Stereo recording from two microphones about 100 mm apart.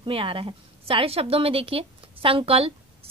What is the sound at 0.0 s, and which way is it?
A woman's voice, 65° right (ahead or behind).